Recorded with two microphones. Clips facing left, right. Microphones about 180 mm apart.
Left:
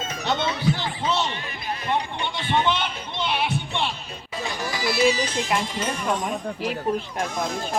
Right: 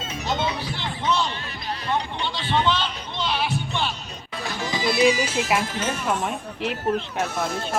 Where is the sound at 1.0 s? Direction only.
25° left (ahead or behind).